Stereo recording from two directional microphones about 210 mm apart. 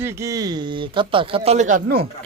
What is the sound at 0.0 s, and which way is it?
Speech, 15° right (ahead or behind).